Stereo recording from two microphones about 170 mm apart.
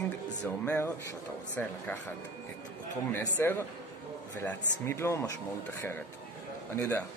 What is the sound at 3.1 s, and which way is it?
A man's voice, 15° left (ahead or behind).